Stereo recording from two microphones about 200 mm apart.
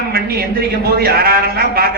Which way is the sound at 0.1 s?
50° right (ahead or behind).